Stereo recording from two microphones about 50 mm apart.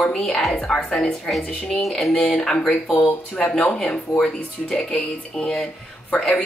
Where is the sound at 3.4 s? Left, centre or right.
Left.